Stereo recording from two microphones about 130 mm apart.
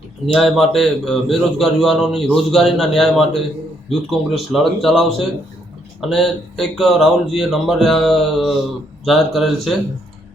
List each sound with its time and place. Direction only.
0.3 s a man's voice: centre (ahead or behind)